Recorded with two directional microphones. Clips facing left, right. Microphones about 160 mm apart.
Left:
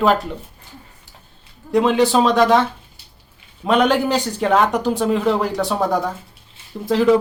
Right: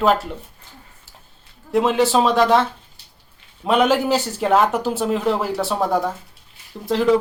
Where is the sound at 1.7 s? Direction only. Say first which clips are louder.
Left 2 dB; centre (ahead or behind).